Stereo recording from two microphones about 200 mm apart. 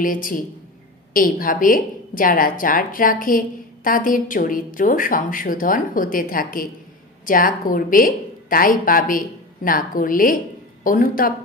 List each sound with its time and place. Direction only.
0.0 s a woman's voice: 45° left (ahead or behind)